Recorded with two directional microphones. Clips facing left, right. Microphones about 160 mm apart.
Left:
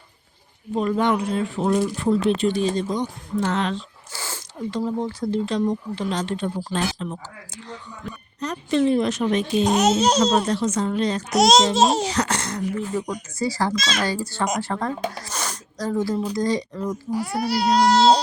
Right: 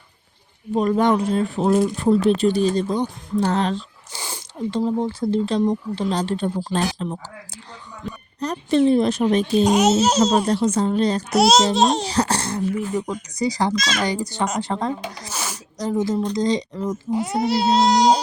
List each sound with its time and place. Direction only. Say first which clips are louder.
0.8 s speech: right 3 dB; 40° right (ahead or behind)
4.1 s speech: right 1 dB; 15° right (ahead or behind); by 9.6 s 35° right (ahead or behind)
9.6 s a child's voice: even; 10° right (ahead or behind)
10.4 s speech: right 3 dB; 35° right (ahead or behind)
11.3 s a child's voice: left 1 dB; centre (ahead or behind)
12.0 s speech: right 2 dB; 30° right (ahead or behind)
12.7 s a child's voice: right 2 dB; 15° right (ahead or behind)
15.2 s a sound: even; 10° right (ahead or behind)
15.8 s speech: right 2 dB; 20° right (ahead or behind)